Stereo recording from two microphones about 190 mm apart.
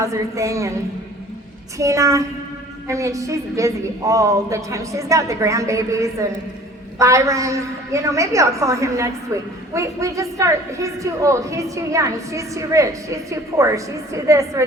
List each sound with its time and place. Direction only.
0.0 s a woman's voice: 15° right (ahead or behind)
1.8 s a woman's voice: 15° right (ahead or behind)